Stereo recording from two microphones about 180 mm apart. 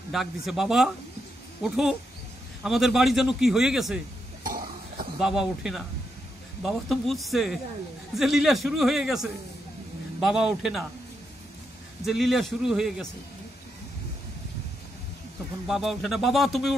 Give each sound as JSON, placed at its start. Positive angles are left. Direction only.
{"t": 0.1, "sound": "a man's voice", "side_deg": 0}
{"t": 4.5, "sound": "cough", "side_deg": -50}
{"t": 5.2, "sound": "a man's voice", "side_deg": -5}
{"t": 12.1, "sound": "a man's voice", "side_deg": 0}
{"t": 15.6, "sound": "a man's voice", "side_deg": 0}